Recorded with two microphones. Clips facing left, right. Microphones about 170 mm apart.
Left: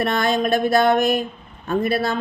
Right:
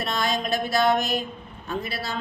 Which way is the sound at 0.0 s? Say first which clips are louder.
Left 7 dB; 55° left (ahead or behind).